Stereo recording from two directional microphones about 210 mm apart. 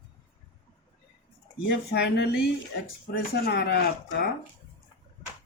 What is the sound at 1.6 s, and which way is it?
Speech, 55° left (ahead or behind).